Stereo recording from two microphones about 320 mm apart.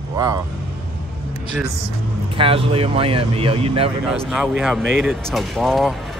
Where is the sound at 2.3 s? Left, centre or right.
Centre.